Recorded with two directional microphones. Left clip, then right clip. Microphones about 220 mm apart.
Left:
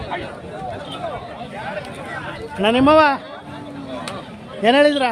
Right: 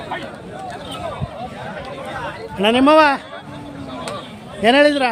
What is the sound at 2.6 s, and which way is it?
Speech, 5° right (ahead or behind).